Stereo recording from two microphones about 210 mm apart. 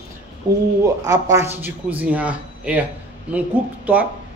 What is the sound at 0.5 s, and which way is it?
Speech, 20° right (ahead or behind).